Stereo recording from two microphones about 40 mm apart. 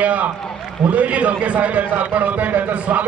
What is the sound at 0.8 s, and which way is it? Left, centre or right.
A man's voice, right.